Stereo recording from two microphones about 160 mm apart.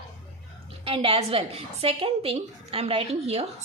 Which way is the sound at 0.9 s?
35° right (ahead or behind).